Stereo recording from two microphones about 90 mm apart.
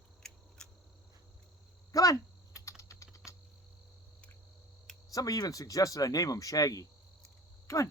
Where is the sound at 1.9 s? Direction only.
40° left (ahead or behind).